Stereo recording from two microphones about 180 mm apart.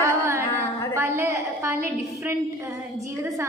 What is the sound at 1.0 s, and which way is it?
A woman's voice, 15° right (ahead or behind).